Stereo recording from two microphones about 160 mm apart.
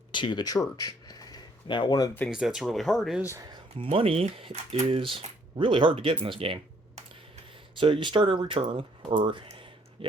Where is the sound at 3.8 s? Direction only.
35° right (ahead or behind).